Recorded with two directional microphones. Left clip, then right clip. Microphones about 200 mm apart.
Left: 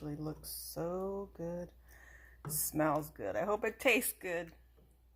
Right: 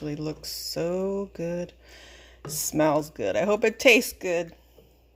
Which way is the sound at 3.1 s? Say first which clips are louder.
Right 11 dB; 40° right (ahead or behind).